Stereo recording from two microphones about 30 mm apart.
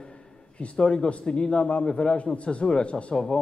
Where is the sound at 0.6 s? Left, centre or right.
Left.